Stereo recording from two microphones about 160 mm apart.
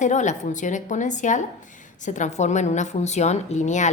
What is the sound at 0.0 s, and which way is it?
A woman's voice, 50° left (ahead or behind).